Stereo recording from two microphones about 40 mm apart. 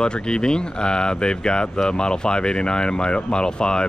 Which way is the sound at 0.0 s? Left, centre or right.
Left.